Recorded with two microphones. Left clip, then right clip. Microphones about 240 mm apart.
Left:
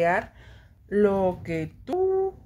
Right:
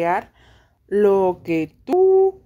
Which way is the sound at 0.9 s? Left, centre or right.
Right.